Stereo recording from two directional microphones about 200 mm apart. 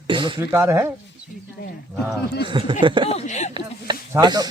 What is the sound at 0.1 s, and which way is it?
Speech, 25° right (ahead or behind).